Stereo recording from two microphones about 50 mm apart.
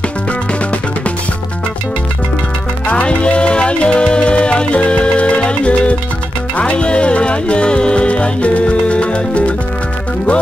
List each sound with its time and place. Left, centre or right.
2.9 s music: left